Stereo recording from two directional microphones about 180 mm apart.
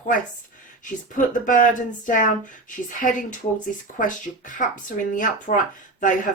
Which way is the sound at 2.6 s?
45° left (ahead or behind).